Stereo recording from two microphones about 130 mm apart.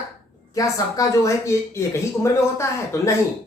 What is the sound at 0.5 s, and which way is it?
Speech, 25° left (ahead or behind).